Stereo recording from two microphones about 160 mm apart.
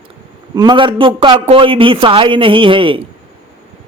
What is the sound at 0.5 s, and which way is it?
Speech, 25° right (ahead or behind).